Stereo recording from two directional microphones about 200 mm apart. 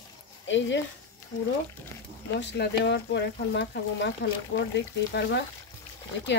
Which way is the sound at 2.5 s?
55° left (ahead or behind).